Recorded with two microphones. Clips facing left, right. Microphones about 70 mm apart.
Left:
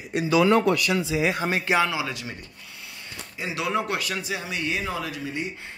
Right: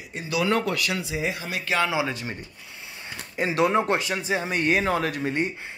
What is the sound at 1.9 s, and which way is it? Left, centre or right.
Speech, right.